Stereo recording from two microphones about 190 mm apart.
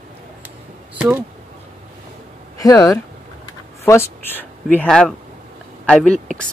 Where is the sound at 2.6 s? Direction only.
15° left (ahead or behind).